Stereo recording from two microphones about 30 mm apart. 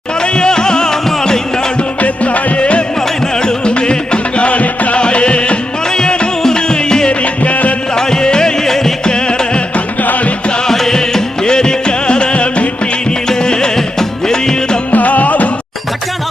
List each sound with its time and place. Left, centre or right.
0.2 s music: left
2.0 s music: left
2.6 s music: left
4.9 s music: left
5.9 s music: left
7.1 s music: left
7.9 s music: left
9.0 s music: left
10.0 s music: left
10.7 s music: centre
11.4 s music: left
13.1 s music: left
14.9 s music: left